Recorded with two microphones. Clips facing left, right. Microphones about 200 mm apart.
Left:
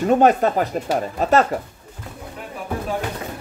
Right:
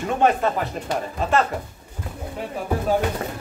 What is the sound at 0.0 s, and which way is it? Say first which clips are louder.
Speech: left 5 dB; 40° left (ahead or behind).